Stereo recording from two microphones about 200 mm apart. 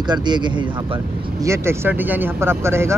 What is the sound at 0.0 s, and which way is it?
Speech, 20° right (ahead or behind).